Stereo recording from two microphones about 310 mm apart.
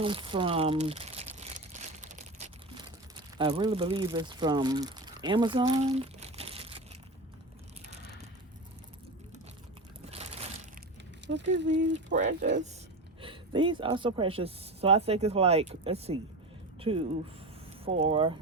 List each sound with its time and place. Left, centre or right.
0.0 s crumpling: centre
3.3 s speech: centre
10.1 s a sound: centre
11.3 s speech: right
12.1 s speech: right
18.0 s speech: centre